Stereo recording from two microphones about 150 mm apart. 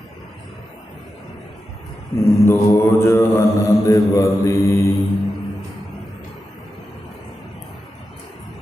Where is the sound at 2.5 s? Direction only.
15° left (ahead or behind).